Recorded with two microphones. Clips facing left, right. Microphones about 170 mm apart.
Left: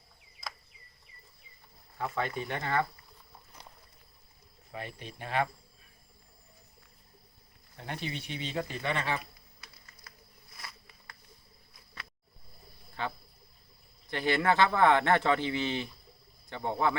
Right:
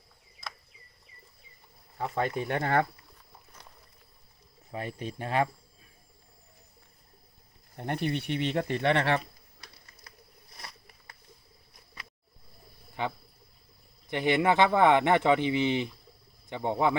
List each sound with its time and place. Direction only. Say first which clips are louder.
2.0 s speech: right 3 dB; 30° right (ahead or behind)
2.5 s speech: right 5 dB; 50° right (ahead or behind)
4.8 s speech: right 6 dB; 45° right (ahead or behind)
7.8 s speech: right 8 dB; 55° right (ahead or behind)
9.6 s a sound: right 3 dB; 35° right (ahead or behind)
13.0 s speech: right 3 dB; 15° right (ahead or behind)